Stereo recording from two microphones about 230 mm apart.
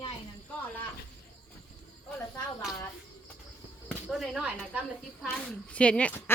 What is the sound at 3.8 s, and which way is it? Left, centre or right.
Speech, centre.